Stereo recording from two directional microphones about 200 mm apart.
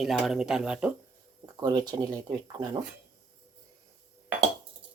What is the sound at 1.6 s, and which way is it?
Speech, 20° right (ahead or behind).